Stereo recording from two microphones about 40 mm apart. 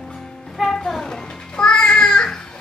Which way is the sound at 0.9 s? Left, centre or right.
Centre.